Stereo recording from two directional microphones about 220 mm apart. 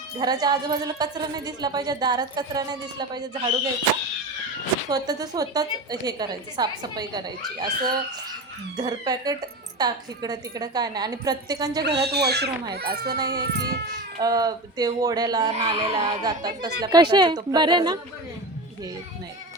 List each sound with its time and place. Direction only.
0.2 s a woman's voice: 20° right (ahead or behind)
4.9 s a woman's voice: 15° right (ahead or behind)
11.8 s speech: 50° right (ahead or behind)
14.2 s a woman's voice: 15° right (ahead or behind)